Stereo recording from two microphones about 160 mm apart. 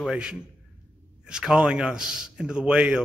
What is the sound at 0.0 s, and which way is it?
A man's voice, 5° right (ahead or behind).